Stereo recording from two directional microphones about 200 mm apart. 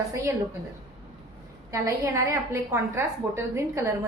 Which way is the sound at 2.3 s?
15° right (ahead or behind).